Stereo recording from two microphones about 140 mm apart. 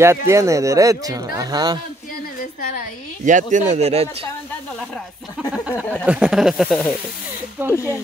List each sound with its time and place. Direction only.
0.0 s a man's voice: 20° right (ahead or behind)
3.3 s speech: 65° right (ahead or behind)
6.0 s speech: 5° right (ahead or behind)
7.7 s speech: 20° left (ahead or behind)